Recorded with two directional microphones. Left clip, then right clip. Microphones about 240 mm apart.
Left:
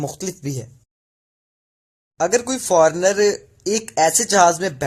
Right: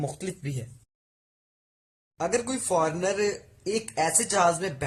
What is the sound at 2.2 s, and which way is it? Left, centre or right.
Speech, left.